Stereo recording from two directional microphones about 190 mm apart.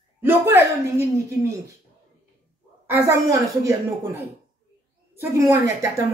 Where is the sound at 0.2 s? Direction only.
10° right (ahead or behind).